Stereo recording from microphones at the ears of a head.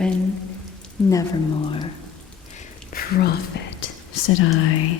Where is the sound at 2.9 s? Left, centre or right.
Left.